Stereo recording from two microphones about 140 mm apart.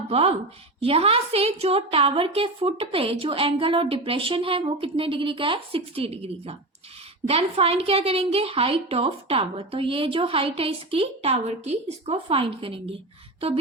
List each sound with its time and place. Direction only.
0.1 s a woman's voice: 45° right (ahead or behind)